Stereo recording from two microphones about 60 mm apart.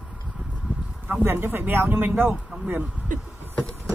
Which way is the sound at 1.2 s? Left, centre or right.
Right.